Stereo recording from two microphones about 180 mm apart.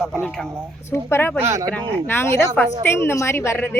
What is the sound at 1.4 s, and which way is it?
Speech, 15° right (ahead or behind).